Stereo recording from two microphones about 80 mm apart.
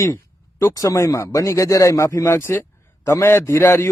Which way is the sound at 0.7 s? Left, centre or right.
Left.